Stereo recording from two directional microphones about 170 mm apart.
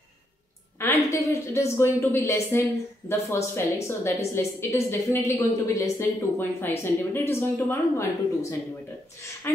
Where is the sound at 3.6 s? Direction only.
15° left (ahead or behind).